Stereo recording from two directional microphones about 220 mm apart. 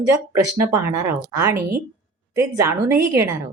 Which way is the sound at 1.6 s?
45° right (ahead or behind).